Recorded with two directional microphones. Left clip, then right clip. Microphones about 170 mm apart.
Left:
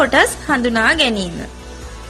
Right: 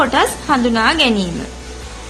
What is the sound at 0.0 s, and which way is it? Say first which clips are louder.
A woman's voice: left 1 dB; 30° left (ahead or behind).